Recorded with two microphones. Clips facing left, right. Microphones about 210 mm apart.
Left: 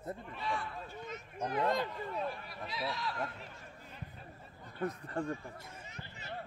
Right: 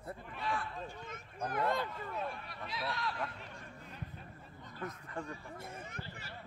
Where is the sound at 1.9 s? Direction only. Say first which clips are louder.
Left 2 dB; centre (ahead or behind).